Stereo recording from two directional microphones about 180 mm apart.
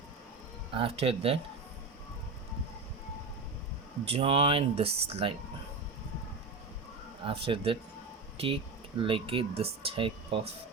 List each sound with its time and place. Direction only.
0.7 s speech: 30° right (ahead or behind)
4.1 s speech: 30° right (ahead or behind)
7.3 s speech: 30° right (ahead or behind)